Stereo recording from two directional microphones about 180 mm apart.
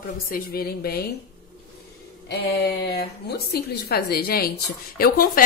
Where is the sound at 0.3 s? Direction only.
55° left (ahead or behind).